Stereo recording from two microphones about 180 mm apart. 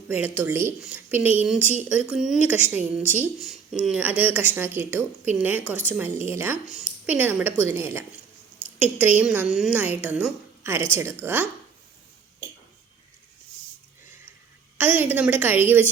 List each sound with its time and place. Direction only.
0.1 s a woman's voice: 10° right (ahead or behind)
14.8 s a woman's voice: 10° right (ahead or behind)